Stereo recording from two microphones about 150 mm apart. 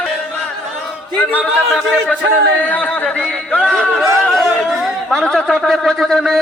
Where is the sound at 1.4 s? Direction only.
Centre (ahead or behind).